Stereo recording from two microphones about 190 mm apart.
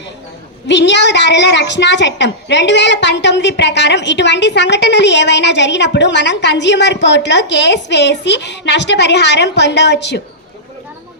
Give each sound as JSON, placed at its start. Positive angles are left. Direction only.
{"t": 0.7, "sound": "a woman's voice", "side_deg": 65}